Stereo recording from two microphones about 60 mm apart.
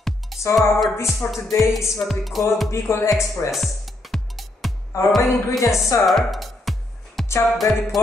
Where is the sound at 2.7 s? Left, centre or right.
Left.